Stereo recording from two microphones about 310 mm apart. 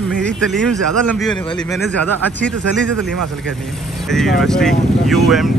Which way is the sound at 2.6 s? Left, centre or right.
Right.